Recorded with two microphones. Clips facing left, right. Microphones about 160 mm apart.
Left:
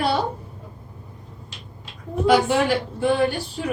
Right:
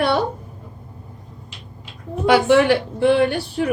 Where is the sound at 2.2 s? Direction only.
65° right (ahead or behind).